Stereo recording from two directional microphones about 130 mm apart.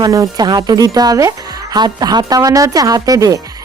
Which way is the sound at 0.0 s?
30° right (ahead or behind).